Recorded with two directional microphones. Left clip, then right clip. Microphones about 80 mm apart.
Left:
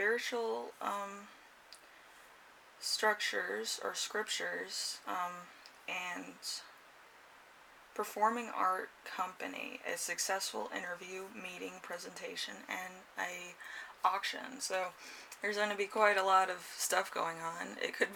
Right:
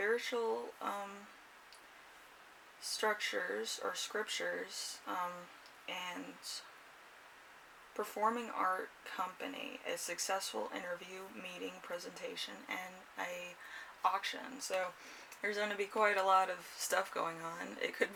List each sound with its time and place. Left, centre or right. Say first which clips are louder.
0.0 s speech: left 1 dB; left
3.0 s speech: left 2 dB; left
7.9 s speech: left 3 dB; left